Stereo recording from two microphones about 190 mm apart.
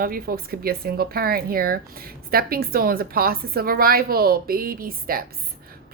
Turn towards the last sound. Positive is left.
turn(degrees=-50)  # may be behind; listen again after turning